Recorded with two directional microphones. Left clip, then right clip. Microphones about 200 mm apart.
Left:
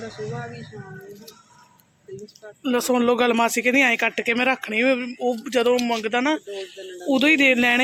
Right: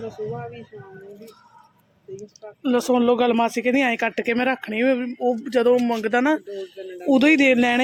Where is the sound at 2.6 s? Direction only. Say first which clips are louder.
Right 1 dB; 25° right (ahead or behind).